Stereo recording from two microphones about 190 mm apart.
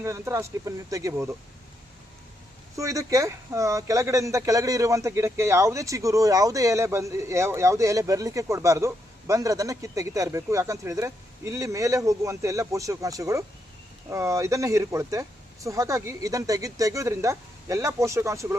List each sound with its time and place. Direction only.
0.0 s speech: 15° right (ahead or behind)
2.7 s speech: 15° right (ahead or behind)